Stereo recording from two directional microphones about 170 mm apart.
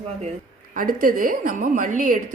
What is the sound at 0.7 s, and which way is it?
A woman's voice, 55° right (ahead or behind).